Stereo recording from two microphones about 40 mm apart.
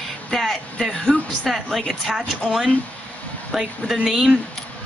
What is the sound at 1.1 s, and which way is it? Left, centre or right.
A woman's voice, centre.